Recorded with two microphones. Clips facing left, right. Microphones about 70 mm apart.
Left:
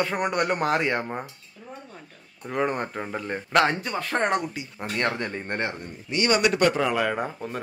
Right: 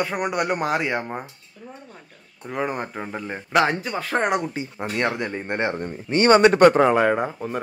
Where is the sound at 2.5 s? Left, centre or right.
Centre.